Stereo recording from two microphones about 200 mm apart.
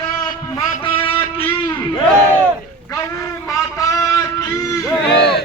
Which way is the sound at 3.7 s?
15° left (ahead or behind).